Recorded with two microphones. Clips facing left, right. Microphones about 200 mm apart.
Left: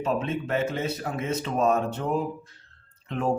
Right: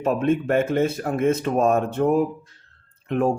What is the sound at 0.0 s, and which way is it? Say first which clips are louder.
Speech: right 6 dB; 50° right (ahead or behind).